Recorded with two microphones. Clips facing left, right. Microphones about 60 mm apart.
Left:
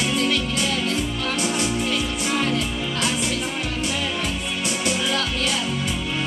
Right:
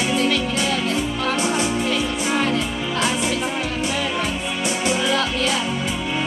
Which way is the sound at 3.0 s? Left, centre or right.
Centre.